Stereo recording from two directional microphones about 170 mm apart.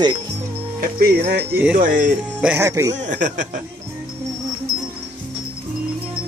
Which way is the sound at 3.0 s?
45° right (ahead or behind).